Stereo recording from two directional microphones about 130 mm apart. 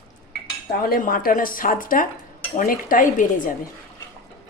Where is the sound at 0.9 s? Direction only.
90° left.